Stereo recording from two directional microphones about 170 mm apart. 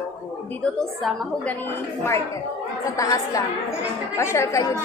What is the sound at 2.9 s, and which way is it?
A woman's voice, 20° left (ahead or behind).